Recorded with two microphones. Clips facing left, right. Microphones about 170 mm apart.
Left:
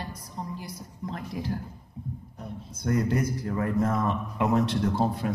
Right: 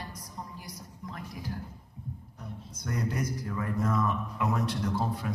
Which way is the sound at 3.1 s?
25° left (ahead or behind).